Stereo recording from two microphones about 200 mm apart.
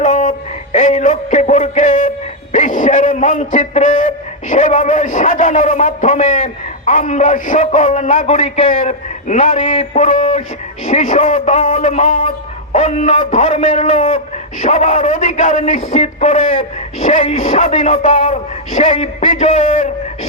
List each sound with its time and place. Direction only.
0.0 s a man's voice: 35° left (ahead or behind)